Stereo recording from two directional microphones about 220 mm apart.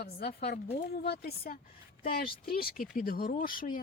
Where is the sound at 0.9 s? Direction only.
45° left (ahead or behind).